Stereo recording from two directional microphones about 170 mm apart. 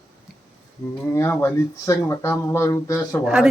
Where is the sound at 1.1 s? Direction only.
15° left (ahead or behind).